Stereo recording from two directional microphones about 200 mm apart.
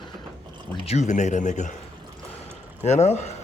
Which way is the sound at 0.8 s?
35° left (ahead or behind).